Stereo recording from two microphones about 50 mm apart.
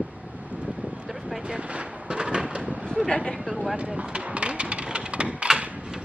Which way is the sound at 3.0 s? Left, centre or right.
Centre.